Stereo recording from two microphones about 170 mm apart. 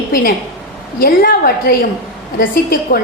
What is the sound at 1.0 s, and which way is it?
A woman's voice, 55° left (ahead or behind).